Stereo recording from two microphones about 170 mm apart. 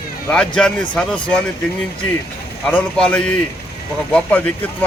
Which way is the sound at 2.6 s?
5° left (ahead or behind).